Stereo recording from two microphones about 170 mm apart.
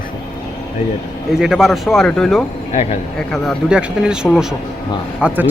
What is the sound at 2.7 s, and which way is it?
Speech, 40° left (ahead or behind).